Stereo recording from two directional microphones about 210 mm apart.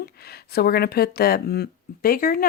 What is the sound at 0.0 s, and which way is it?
Speech, 50° left (ahead or behind).